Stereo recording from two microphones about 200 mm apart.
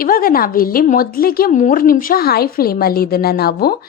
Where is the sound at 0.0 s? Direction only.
45° left (ahead or behind).